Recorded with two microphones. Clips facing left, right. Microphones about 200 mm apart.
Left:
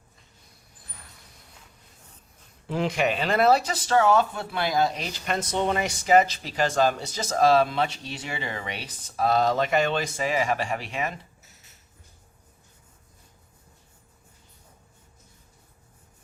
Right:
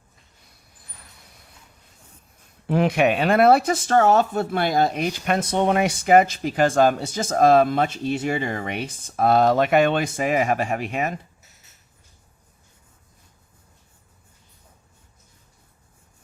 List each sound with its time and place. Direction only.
2.6 s speech: 60° right (ahead or behind)